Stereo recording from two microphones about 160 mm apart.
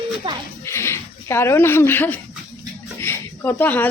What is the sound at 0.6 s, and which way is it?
Speech, 15° left (ahead or behind).